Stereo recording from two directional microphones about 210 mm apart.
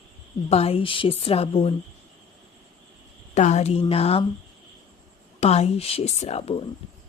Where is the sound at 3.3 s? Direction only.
30° left (ahead or behind).